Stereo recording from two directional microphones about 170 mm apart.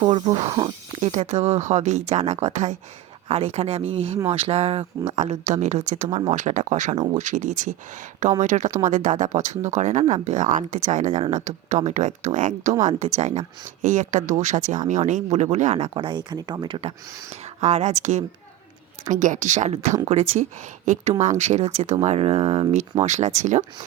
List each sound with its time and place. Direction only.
0.0 s speech: 35° right (ahead or behind)
0.9 s speech: 40° right (ahead or behind)
6.9 s speech: 25° right (ahead or behind)
7.2 s speech: 45° right (ahead or behind); by 16.9 s 30° right (ahead or behind)
17.6 s speech: 40° right (ahead or behind)